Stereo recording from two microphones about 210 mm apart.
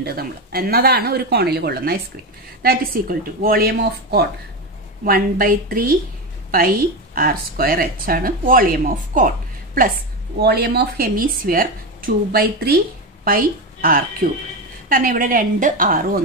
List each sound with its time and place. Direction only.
0.0 s speech: 45° right (ahead or behind)
7.2 s speech: 45° right (ahead or behind)
10.4 s a woman's voice: 50° right (ahead or behind)